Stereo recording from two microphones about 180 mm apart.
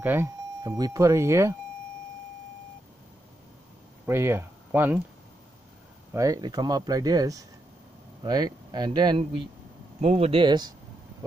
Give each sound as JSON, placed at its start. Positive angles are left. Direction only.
{"t": 0.0, "sound": "speech", "side_deg": -10}
{"t": 4.0, "sound": "speech", "side_deg": -15}
{"t": 6.1, "sound": "speech", "side_deg": -20}
{"t": 9.9, "sound": "speech", "side_deg": -35}